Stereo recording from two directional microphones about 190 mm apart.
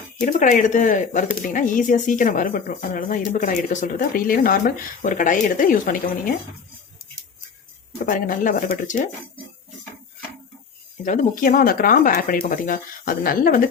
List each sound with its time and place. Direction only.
0.2 s a woman's voice: 45° left (ahead or behind)
8.0 s a woman's voice: 45° left (ahead or behind)
11.0 s a woman's voice: 40° left (ahead or behind)